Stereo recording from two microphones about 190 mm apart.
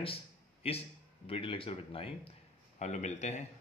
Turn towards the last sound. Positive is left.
turn(degrees=35)  # may be behind; listen again after turning